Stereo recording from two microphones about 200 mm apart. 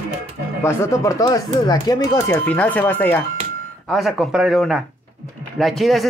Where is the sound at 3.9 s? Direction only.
Centre (ahead or behind).